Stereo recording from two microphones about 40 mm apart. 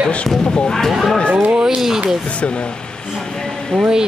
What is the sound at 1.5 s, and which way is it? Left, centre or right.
Speech, centre.